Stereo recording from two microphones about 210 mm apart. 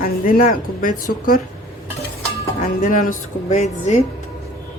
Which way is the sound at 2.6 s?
40° left (ahead or behind).